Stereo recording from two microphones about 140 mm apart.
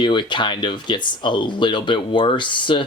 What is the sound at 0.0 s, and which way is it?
Speech, 35° left (ahead or behind).